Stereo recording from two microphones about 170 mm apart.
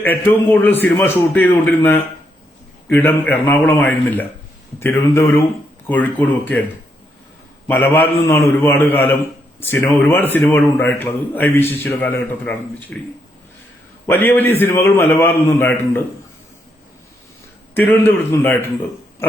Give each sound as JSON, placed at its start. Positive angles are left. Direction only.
{"t": 0.0, "sound": "a man's voice", "side_deg": 10}
{"t": 7.7, "sound": "a man's voice", "side_deg": 10}
{"t": 14.1, "sound": "a man's voice", "side_deg": 10}
{"t": 17.7, "sound": "a man's voice", "side_deg": 10}